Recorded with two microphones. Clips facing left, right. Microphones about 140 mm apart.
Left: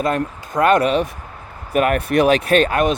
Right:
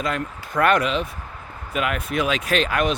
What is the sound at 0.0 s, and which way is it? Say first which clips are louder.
Speech: left 6 dB; 45° left (ahead or behind).